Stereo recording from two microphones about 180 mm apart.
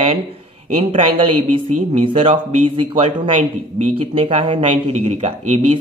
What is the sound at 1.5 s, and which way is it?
Speech, 30° right (ahead or behind).